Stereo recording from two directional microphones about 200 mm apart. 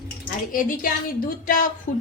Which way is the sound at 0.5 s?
40° left (ahead or behind).